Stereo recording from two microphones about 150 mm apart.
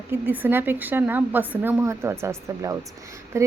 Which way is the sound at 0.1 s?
15° right (ahead or behind).